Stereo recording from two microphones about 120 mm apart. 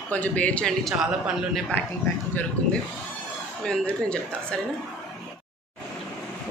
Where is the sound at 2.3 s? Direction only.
15° left (ahead or behind).